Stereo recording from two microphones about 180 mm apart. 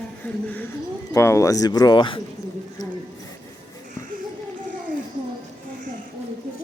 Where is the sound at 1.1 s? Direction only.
15° left (ahead or behind).